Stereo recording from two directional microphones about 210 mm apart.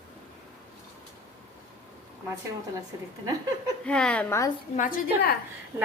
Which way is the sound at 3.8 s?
5° left (ahead or behind).